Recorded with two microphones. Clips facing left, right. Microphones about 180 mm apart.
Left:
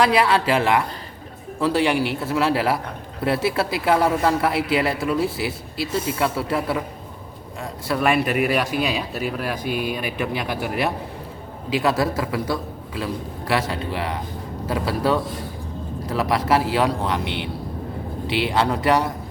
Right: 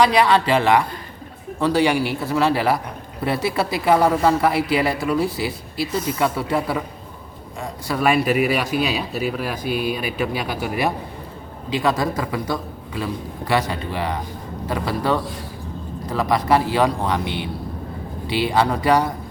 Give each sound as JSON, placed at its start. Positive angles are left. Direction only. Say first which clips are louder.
{"t": 0.0, "sound": "speech", "louder": "right 2 dB", "side_deg": 5}
{"t": 9.6, "sound": "speech", "louder": "right 3 dB", "side_deg": -40}
{"t": 10.3, "sound": "speech", "louder": "even", "side_deg": 0}